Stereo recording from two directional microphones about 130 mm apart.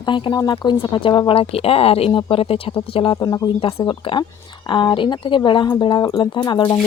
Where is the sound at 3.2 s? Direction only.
25° left (ahead or behind).